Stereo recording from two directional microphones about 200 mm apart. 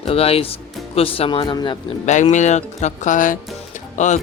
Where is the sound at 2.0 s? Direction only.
35° left (ahead or behind).